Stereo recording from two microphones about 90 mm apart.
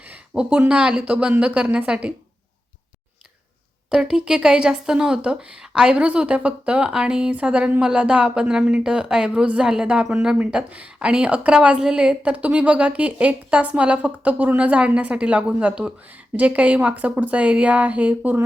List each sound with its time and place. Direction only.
0.0 s a sound: 15° right (ahead or behind)
0.7 s speech: 10° right (ahead or behind)
3.8 s speech: 5° right (ahead or behind)